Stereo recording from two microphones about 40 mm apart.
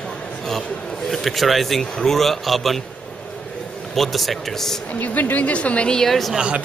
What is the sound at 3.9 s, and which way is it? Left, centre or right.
Speech, centre.